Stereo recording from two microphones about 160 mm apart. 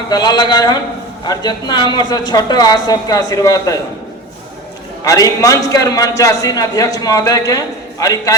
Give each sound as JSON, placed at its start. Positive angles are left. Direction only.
{"t": 0.1, "sound": "a man's voice", "side_deg": 25}
{"t": 5.0, "sound": "a man's voice", "side_deg": 20}